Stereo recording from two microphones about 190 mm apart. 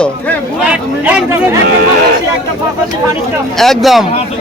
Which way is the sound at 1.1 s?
10° right (ahead or behind).